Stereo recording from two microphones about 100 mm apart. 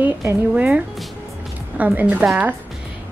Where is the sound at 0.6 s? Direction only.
10° right (ahead or behind).